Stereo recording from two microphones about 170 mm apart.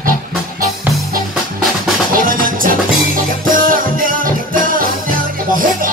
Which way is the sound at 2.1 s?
55° right (ahead or behind).